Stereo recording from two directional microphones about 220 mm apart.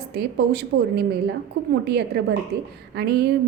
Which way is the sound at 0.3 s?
45° right (ahead or behind).